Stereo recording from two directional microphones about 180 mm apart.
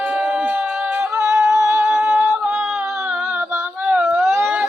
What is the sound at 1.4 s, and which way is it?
Humming, 15° right (ahead or behind).